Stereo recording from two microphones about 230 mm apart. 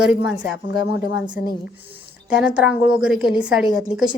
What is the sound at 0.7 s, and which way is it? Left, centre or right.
Speech, left.